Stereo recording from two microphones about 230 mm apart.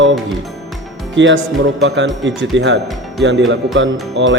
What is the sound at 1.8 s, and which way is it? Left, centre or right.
Speech, right.